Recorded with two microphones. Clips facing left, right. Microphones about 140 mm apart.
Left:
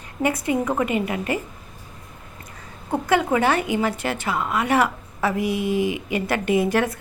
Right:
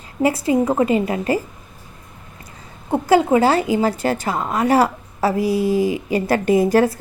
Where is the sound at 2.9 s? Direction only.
30° right (ahead or behind).